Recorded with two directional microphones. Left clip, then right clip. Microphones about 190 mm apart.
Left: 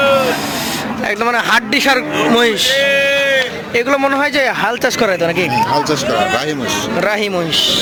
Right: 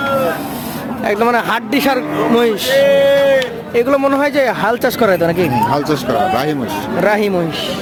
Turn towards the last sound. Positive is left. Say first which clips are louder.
# right 2 dB
turn(degrees=-10)  # may be behind; listen again after turning